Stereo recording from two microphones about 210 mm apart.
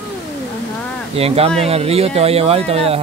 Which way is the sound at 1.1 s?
30° right (ahead or behind).